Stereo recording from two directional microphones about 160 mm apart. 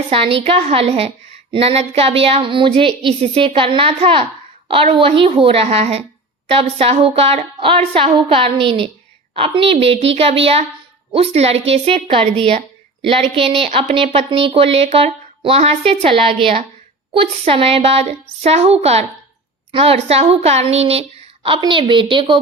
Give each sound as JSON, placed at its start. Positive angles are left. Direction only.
{"t": 0.1, "sound": "a woman's voice", "side_deg": -35}